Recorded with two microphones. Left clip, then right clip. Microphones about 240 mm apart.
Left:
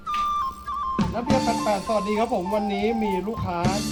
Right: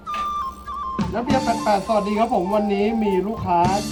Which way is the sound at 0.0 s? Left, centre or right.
Centre.